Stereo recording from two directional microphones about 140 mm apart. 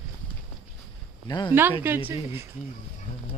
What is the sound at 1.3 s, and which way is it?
Speech, 30° left (ahead or behind).